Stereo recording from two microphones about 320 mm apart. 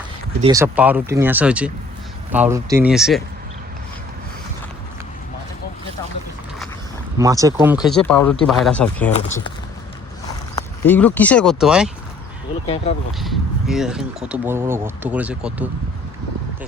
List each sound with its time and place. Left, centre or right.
0.4 s speech: centre
7.2 s speech: centre
10.2 s speech: centre
12.6 s speech: centre
13.1 s speech: centre